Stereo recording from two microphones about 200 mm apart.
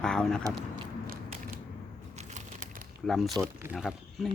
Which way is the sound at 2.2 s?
40° right (ahead or behind).